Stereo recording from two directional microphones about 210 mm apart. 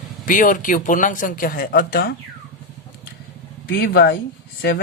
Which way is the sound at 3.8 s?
50° left (ahead or behind).